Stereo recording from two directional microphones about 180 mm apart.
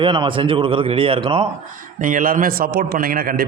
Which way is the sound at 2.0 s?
45° right (ahead or behind).